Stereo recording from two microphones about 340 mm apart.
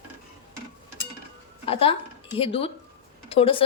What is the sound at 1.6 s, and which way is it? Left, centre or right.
Speech, centre.